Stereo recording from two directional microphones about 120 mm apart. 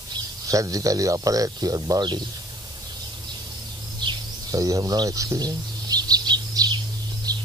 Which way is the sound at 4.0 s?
35° right (ahead or behind).